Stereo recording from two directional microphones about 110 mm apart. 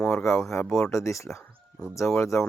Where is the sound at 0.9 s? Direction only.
30° left (ahead or behind).